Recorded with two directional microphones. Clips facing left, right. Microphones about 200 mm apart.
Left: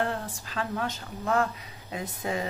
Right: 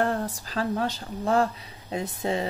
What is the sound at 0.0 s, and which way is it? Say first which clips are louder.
Speech: right 4 dB; 40° right (ahead or behind).